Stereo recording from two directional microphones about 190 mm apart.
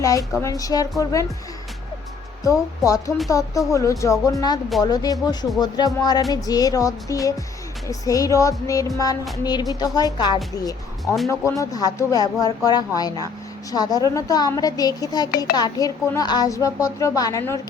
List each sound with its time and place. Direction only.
0.0 s a woman's voice: 20° left (ahead or behind)
2.4 s a woman's voice: 15° left (ahead or behind)
11.0 s speech: centre (ahead or behind)
11.3 s a woman's voice: 15° left (ahead or behind)